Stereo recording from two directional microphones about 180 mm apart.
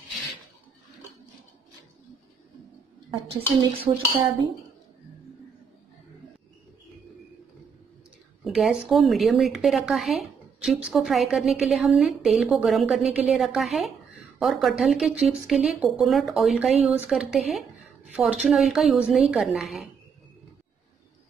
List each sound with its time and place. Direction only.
3.3 s dishes: 30° right (ahead or behind)
8.5 s a woman's voice: centre (ahead or behind)